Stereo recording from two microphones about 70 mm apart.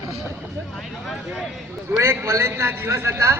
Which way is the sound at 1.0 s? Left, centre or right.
Centre.